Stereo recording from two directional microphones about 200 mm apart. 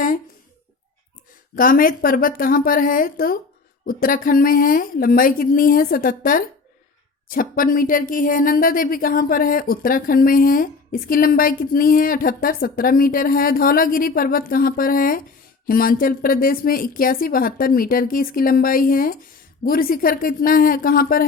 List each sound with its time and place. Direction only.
1.5 s speech: 45° left (ahead or behind)